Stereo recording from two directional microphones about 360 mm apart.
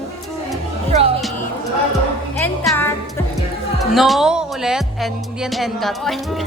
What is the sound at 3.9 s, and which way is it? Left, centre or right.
Music, centre.